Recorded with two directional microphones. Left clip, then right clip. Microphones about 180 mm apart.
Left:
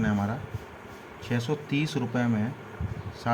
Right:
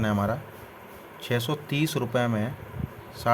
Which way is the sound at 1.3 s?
45° right (ahead or behind).